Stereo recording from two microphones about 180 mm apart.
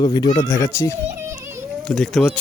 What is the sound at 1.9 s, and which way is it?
Speech, 5° left (ahead or behind).